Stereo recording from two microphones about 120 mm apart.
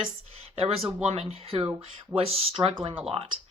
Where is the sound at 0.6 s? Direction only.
55° right (ahead or behind).